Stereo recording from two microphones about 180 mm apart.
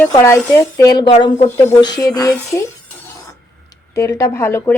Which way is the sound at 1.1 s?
35° left (ahead or behind).